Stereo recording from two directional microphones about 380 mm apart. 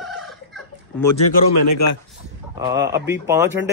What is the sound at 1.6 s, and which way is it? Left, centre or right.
Speech, left.